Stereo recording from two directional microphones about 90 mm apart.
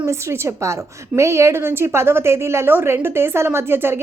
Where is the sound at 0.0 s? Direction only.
30° right (ahead or behind).